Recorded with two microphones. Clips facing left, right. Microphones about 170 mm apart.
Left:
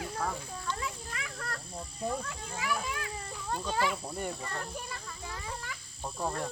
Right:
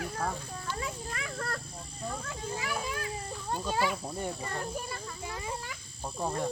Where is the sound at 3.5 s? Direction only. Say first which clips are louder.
Right 1 dB; 10° right (ahead or behind).